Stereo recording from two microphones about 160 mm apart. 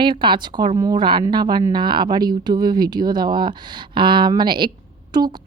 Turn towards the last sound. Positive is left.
turn(degrees=-25)  # may be behind; listen again after turning